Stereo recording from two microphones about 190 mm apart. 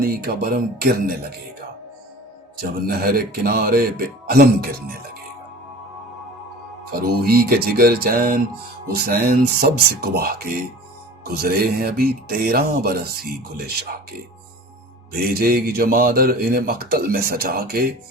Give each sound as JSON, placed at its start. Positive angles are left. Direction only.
{"t": 0.0, "sound": "a man's voice", "side_deg": -55}
{"t": 2.6, "sound": "a man's voice", "side_deg": -50}
{"t": 7.0, "sound": "a man's voice", "side_deg": -55}
{"t": 15.1, "sound": "a man's voice", "side_deg": -50}